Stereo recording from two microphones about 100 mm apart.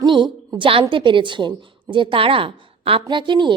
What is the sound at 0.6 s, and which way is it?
A woman's voice, 65° right (ahead or behind).